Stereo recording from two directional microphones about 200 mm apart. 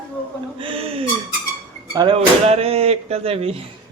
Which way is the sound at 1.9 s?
25° right (ahead or behind).